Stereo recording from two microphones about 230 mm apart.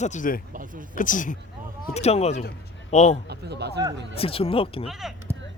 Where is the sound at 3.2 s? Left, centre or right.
Right.